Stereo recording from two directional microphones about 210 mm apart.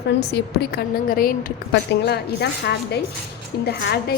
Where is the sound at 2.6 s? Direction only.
55° left (ahead or behind).